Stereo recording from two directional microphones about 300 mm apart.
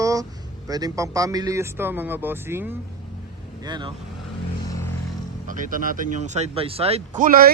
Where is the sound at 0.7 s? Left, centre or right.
Centre.